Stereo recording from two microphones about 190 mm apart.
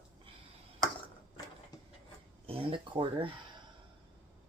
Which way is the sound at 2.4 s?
30° right (ahead or behind).